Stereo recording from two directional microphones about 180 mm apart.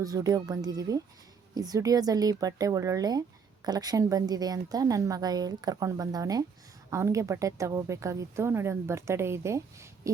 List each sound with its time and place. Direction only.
0.0 s a woman's voice: 20° right (ahead or behind)